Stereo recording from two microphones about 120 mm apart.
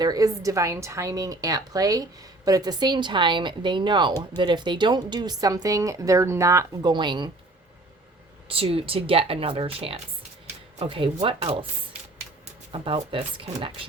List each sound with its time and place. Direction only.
0.0 s a woman's voice: 30° right (ahead or behind)
6.9 s a woman's voice: 40° right (ahead or behind)
8.4 s speech: 50° right (ahead or behind)
12.7 s speech: 50° right (ahead or behind)